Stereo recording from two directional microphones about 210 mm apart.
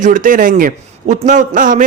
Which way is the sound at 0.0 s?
40° right (ahead or behind).